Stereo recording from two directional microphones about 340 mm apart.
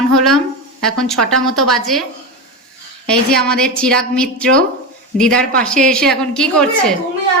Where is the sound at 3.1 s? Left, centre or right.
Centre.